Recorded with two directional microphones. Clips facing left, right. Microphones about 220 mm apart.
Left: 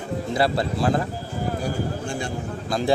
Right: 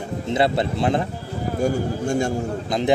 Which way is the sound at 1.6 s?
45° right (ahead or behind).